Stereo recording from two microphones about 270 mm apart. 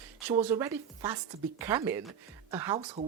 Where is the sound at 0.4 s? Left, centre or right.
Centre.